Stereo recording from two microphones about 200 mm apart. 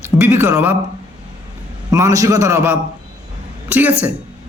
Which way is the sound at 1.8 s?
15° right (ahead or behind).